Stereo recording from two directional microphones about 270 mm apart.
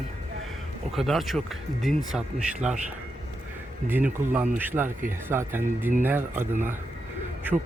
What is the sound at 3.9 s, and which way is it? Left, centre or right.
Speech, centre.